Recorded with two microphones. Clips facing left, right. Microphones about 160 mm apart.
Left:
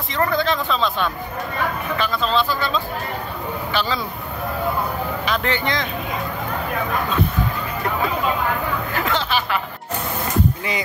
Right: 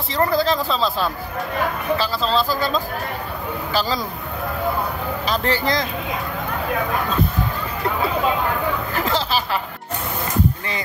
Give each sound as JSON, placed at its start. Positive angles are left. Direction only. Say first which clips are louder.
{"t": 0.1, "sound": "speech", "louder": "right 2 dB", "side_deg": -35}
{"t": 5.2, "sound": "speech", "louder": "right 3 dB", "side_deg": -35}
{"t": 8.9, "sound": "a sound", "louder": "left 1 dB", "side_deg": -35}